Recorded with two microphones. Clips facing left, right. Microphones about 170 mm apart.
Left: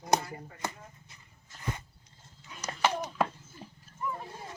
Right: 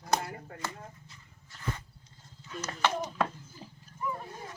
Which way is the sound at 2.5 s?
10° left (ahead or behind).